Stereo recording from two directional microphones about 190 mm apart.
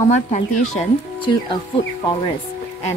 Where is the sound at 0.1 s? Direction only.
40° left (ahead or behind).